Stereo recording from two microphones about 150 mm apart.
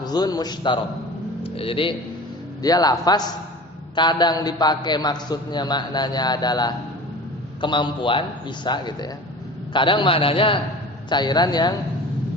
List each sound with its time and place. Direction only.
0.0 s a man's voice: 25° left (ahead or behind)
2.6 s a man's voice: 25° left (ahead or behind)